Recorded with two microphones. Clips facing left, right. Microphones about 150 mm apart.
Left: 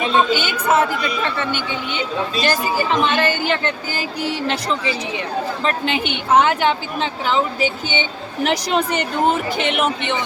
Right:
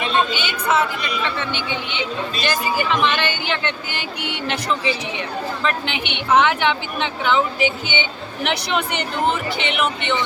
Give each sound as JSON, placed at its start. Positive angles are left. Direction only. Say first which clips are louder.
{"t": 0.3, "sound": "a woman's voice", "louder": "left 3 dB", "side_deg": 45}
{"t": 5.6, "sound": "a woman's voice", "louder": "left 3 dB", "side_deg": 35}